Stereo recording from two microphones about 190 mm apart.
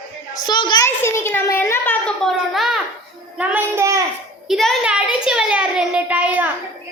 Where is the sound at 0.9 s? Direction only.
15° left (ahead or behind).